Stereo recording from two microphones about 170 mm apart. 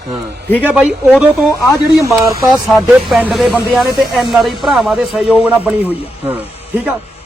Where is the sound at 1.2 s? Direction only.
5° right (ahead or behind).